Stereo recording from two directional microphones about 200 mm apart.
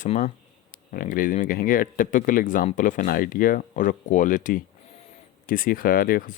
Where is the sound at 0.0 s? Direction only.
40° left (ahead or behind).